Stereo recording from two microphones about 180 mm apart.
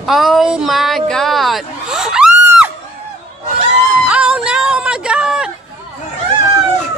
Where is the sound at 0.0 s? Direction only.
Centre (ahead or behind).